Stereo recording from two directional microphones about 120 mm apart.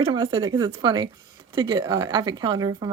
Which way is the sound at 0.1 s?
40° right (ahead or behind).